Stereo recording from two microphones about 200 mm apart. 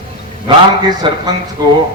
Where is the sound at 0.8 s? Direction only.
20° right (ahead or behind).